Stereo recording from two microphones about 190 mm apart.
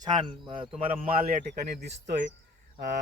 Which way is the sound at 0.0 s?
25° right (ahead or behind).